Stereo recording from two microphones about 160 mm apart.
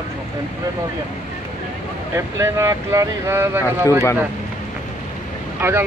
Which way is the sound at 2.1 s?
20° right (ahead or behind).